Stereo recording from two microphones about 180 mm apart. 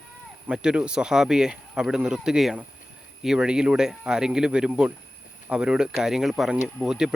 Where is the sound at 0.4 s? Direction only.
5° right (ahead or behind).